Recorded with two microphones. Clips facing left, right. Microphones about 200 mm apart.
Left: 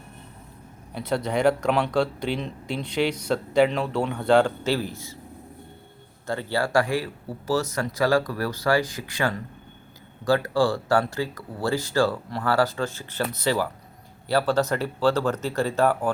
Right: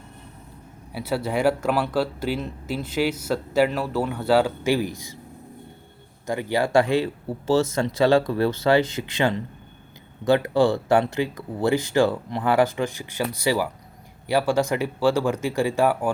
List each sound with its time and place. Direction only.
0.9 s speech: 5° right (ahead or behind)
6.2 s speech: 15° right (ahead or behind)